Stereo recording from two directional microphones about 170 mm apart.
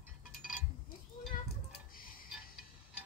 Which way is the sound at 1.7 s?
60° left (ahead or behind).